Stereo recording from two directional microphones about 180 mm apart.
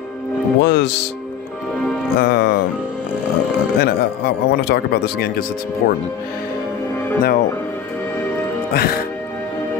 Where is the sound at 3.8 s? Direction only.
70° left (ahead or behind).